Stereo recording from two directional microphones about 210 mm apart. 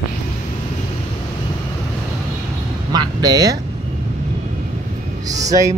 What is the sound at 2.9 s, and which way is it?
Speech, 20° right (ahead or behind).